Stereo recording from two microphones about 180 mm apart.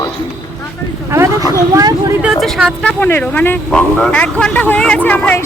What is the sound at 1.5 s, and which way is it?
Speech, 20° right (ahead or behind).